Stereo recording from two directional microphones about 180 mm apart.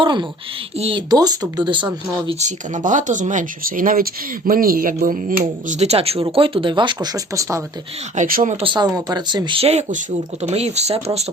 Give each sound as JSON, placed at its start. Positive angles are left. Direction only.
{"t": 0.0, "sound": "speech", "side_deg": -25}
{"t": 2.4, "sound": "speech", "side_deg": -45}
{"t": 8.1, "sound": "speech", "side_deg": -45}
{"t": 8.5, "sound": "speech", "side_deg": -25}